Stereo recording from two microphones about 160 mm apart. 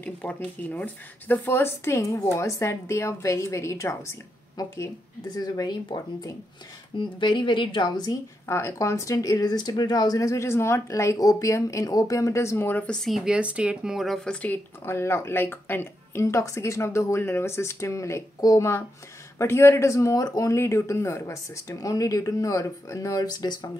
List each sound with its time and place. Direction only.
0.0 s a woman's voice: 10° left (ahead or behind); by 23.7 s 25° left (ahead or behind)